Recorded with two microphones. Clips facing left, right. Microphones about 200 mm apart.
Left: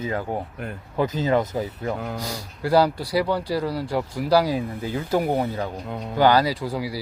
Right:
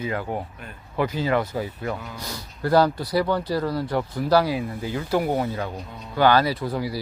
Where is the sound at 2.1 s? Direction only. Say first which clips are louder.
Left 4 dB; 40° left (ahead or behind).